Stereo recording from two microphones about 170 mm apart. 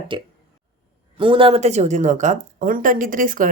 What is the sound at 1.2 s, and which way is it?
Speech, 30° right (ahead or behind).